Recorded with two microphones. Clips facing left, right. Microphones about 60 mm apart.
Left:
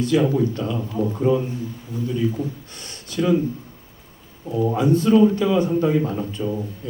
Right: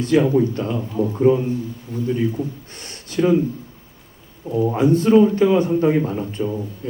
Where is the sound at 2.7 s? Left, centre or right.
Right.